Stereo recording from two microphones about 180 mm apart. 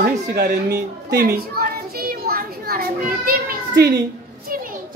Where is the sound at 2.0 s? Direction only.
55° right (ahead or behind).